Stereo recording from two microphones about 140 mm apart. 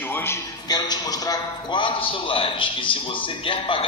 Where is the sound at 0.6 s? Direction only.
30° left (ahead or behind).